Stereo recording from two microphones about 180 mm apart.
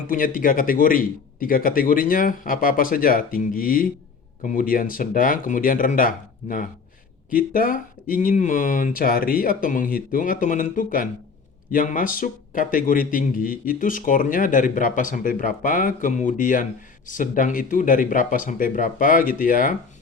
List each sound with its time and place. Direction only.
0.1 s a man's voice: 50° left (ahead or behind)